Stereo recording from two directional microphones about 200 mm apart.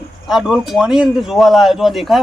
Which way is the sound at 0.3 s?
Centre (ahead or behind).